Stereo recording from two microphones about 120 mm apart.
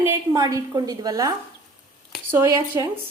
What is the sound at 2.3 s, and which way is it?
Speech, 20° right (ahead or behind).